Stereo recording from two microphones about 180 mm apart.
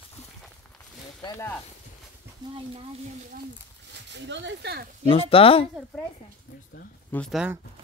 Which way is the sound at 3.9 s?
85° right.